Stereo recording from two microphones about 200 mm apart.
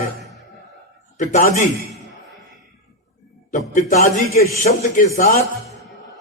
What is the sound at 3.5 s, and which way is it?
A man's voice, 40° left (ahead or behind).